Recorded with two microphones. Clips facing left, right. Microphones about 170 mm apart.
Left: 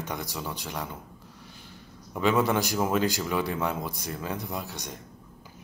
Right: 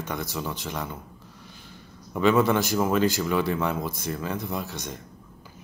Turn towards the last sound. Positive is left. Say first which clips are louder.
# right 3 dB
turn(degrees=15)  # may be behind; listen again after turning